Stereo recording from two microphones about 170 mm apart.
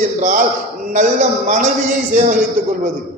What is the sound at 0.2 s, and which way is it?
A man's voice, 50° right (ahead or behind).